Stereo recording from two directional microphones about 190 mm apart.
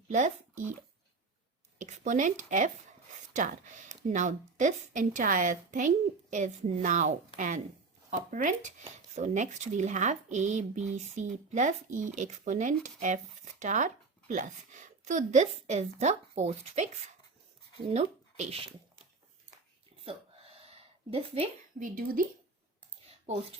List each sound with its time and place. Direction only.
0.1 s speech: 40° right (ahead or behind)
1.8 s speech: 40° right (ahead or behind)
20.1 s a sound: 30° right (ahead or behind)
21.8 s speech: 45° right (ahead or behind)
23.2 s speech: 30° right (ahead or behind)